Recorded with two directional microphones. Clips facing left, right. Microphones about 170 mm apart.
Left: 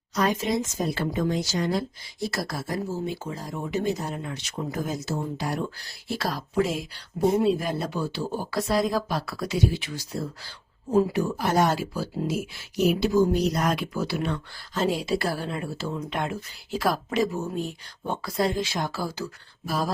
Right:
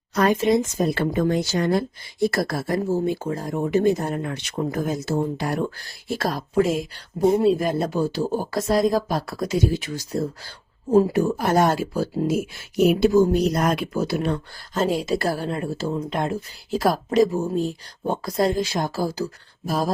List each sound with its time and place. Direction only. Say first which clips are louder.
0.1 s speech: right 6 dB; 60° right (ahead or behind); by 19.9 s 40° right (ahead or behind)